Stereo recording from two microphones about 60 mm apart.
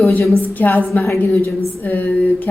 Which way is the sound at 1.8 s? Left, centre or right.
Left.